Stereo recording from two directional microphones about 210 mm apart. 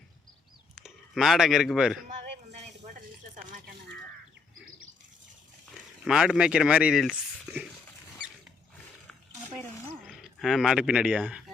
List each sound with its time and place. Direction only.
0.8 s speech: centre (ahead or behind)
6.1 s speech: 5° right (ahead or behind)
8.2 s rodents: 5° right (ahead or behind)
10.1 s speech: centre (ahead or behind)